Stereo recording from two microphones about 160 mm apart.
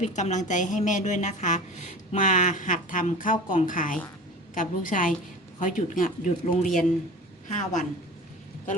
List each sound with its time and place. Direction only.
0.0 s a woman's voice: 50° left (ahead or behind)